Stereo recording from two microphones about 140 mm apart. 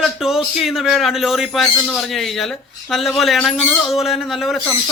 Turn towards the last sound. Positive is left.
turn(degrees=0)  # may be behind; listen again after turning